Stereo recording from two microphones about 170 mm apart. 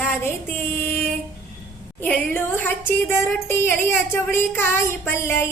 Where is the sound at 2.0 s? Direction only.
10° left (ahead or behind).